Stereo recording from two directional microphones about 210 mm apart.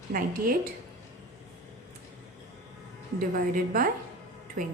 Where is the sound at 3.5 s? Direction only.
40° right (ahead or behind).